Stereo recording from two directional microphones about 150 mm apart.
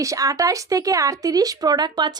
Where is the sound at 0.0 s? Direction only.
20° right (ahead or behind).